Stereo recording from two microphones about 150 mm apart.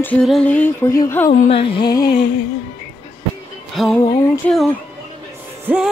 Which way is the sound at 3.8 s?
Centre (ahead or behind).